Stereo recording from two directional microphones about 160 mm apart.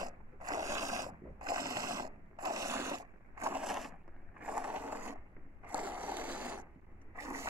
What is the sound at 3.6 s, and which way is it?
Crushing, centre (ahead or behind).